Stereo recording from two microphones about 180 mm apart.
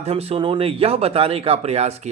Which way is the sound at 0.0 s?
35° right (ahead or behind).